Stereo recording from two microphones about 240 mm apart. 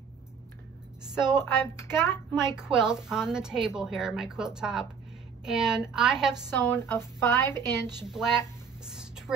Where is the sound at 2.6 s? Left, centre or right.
Centre.